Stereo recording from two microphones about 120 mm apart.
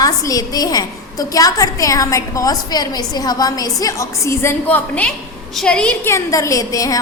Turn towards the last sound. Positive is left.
turn(degrees=30)  # may be behind; listen again after turning